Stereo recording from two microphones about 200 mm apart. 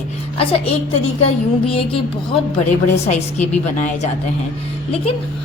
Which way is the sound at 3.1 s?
35° left (ahead or behind).